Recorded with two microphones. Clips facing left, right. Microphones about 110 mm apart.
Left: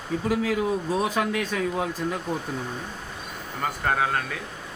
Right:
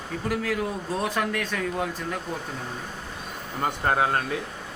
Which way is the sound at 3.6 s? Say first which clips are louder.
Right 1 dB; 30° right (ahead or behind).